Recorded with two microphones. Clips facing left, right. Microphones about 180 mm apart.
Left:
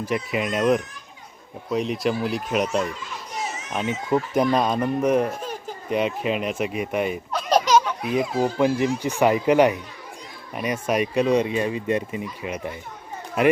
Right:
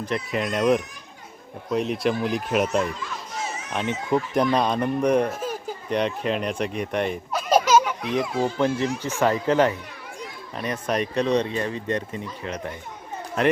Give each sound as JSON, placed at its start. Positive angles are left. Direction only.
{"t": 0.0, "sound": "speech", "side_deg": 5}
{"t": 1.7, "sound": "speech", "side_deg": 0}
{"t": 7.3, "sound": "baby laughter", "side_deg": -5}
{"t": 8.3, "sound": "speech", "side_deg": 40}
{"t": 8.5, "sound": "speech", "side_deg": 10}